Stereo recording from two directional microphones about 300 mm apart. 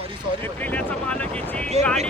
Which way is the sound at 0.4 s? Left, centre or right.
Centre.